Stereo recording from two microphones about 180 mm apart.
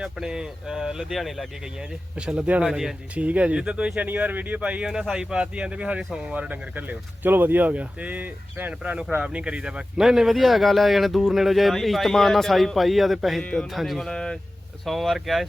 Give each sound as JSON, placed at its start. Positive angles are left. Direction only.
{"t": 0.0, "sound": "speech", "side_deg": -5}